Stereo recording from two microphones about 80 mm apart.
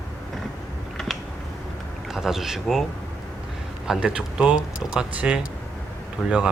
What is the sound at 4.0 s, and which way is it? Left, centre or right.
Speech, centre.